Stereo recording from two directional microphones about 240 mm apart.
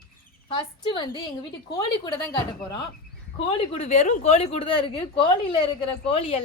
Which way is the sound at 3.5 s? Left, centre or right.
Left.